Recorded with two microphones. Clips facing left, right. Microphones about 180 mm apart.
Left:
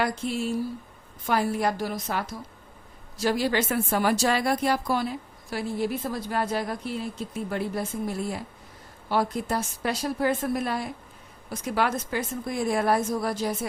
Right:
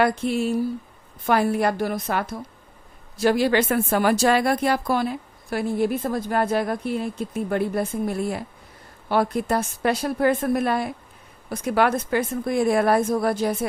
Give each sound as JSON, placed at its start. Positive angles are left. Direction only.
{"t": 0.0, "sound": "a woman's voice", "side_deg": -60}